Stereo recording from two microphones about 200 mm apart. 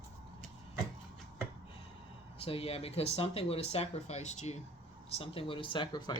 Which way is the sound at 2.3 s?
30° left (ahead or behind).